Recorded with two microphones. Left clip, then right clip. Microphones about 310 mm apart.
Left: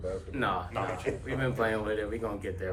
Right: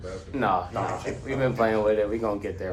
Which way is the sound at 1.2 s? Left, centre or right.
Centre.